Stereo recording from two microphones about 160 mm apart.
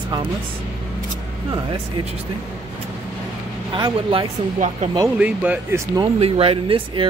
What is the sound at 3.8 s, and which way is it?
Speech, 30° right (ahead or behind).